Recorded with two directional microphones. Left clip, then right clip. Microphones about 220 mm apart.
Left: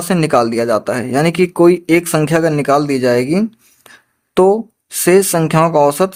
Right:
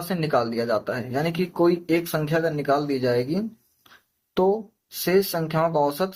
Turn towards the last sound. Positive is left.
turn(degrees=40)  # may be behind; listen again after turning